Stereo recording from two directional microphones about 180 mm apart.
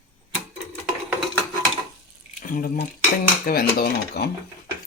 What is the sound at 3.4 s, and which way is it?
Speech, 55° left (ahead or behind).